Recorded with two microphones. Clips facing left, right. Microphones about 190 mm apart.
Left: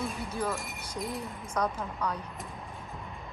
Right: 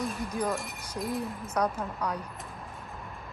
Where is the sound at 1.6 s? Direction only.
10° right (ahead or behind).